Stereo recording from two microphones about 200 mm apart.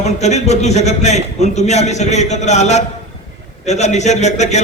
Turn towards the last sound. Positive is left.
turn(degrees=35)  # may be behind; listen again after turning